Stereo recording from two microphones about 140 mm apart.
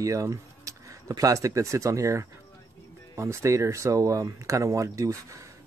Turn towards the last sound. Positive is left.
turn(degrees=-25)  # may be behind; listen again after turning